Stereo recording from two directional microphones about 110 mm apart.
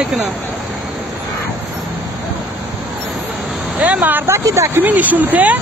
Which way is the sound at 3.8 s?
15° right (ahead or behind).